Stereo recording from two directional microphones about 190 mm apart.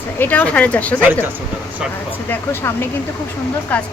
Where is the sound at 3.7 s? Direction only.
5° left (ahead or behind).